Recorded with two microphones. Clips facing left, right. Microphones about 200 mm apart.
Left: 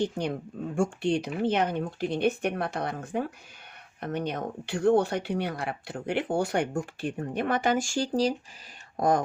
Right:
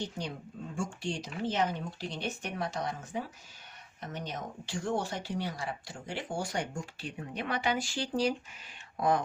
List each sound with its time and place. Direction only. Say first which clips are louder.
0.0 s speech: left 9 dB; 60° left (ahead or behind)